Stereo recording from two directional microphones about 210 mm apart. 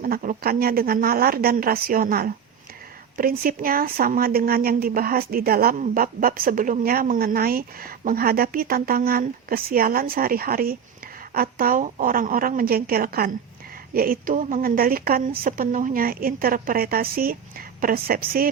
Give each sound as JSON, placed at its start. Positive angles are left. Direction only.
{"t": 0.0, "sound": "speech", "side_deg": -40}